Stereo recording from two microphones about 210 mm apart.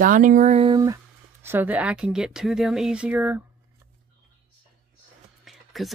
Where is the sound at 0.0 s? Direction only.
40° right (ahead or behind); by 0.9 s 20° right (ahead or behind).